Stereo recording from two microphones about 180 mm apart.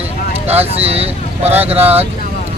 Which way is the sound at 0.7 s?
35° right (ahead or behind).